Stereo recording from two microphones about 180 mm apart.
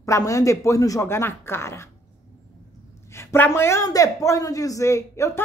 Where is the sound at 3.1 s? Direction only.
15° left (ahead or behind).